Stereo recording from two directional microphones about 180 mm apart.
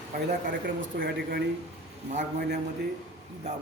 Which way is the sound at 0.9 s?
55° right (ahead or behind).